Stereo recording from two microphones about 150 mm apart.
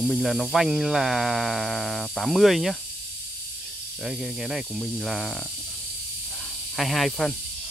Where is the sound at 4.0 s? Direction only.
Centre (ahead or behind).